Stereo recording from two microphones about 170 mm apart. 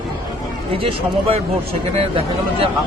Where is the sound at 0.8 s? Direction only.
35° right (ahead or behind).